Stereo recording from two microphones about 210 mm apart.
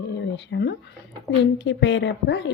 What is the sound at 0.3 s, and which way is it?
A woman's voice, 55° left (ahead or behind).